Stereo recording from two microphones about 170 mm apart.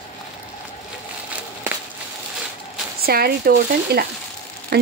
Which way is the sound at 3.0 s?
65° right (ahead or behind).